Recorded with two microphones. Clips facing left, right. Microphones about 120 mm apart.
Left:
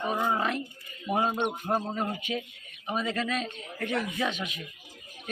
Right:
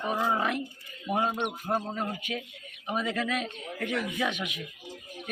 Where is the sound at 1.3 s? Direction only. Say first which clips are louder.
Left 3 dB; 30° left (ahead or behind).